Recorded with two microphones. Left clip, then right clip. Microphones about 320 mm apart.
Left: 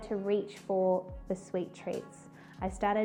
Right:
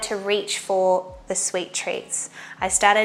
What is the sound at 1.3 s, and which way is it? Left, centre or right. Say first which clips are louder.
A woman's voice: right 10 dB; centre.